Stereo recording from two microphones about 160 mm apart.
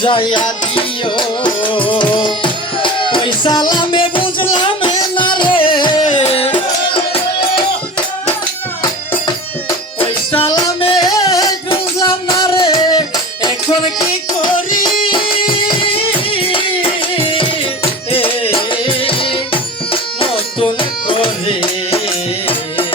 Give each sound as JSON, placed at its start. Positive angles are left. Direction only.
{"t": 0.0, "sound": "music", "side_deg": 30}
{"t": 8.8, "sound": "music", "side_deg": 25}
{"t": 14.8, "sound": "music", "side_deg": 30}